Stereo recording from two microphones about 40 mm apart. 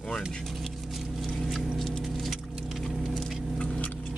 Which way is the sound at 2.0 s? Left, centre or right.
Centre.